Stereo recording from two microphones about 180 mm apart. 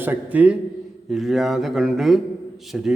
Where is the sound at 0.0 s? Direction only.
10° right (ahead or behind).